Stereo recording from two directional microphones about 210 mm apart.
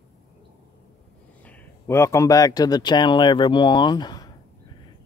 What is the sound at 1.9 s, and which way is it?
Speech, 15° left (ahead or behind).